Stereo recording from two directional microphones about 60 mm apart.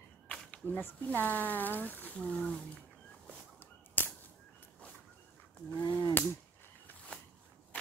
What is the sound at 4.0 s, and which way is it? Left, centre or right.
Whip, left.